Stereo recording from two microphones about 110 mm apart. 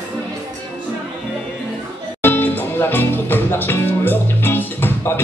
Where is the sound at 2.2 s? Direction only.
20° left (ahead or behind).